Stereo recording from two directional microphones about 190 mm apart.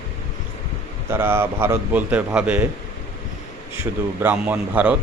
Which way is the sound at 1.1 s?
10° right (ahead or behind).